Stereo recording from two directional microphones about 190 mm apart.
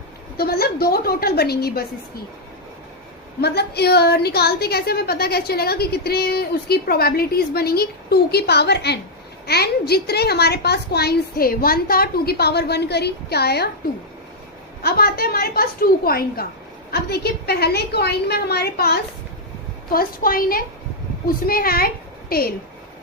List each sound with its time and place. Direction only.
0.3 s a woman's voice: 55° left (ahead or behind)
3.4 s a woman's voice: 60° left (ahead or behind)
14.8 s a woman's voice: 55° left (ahead or behind)